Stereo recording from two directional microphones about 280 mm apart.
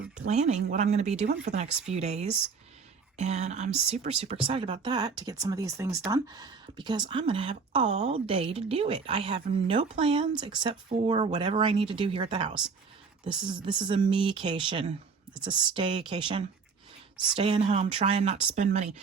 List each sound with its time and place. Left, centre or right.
0.3 s a woman's voice: right
13.7 s a woman's voice: centre